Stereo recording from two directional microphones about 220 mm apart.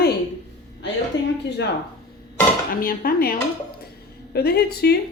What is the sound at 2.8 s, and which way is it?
Speech, 40° left (ahead or behind).